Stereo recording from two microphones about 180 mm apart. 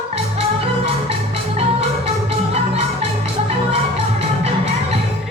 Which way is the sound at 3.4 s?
35° right (ahead or behind).